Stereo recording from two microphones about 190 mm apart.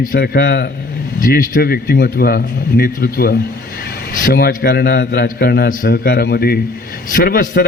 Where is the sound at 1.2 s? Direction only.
45° left (ahead or behind).